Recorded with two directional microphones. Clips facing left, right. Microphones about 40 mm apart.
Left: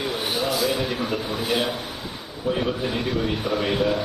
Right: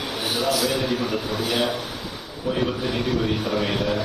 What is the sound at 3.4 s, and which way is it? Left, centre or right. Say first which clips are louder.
Speech: even; left.